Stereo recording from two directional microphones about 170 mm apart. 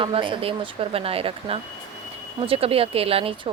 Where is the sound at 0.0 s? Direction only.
30° right (ahead or behind).